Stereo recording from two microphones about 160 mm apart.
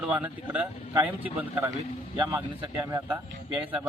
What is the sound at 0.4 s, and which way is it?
A man's voice, 10° right (ahead or behind).